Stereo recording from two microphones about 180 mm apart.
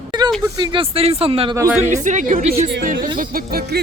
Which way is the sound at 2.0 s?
45° right (ahead or behind).